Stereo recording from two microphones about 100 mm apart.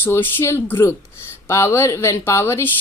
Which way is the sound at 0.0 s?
20° left (ahead or behind).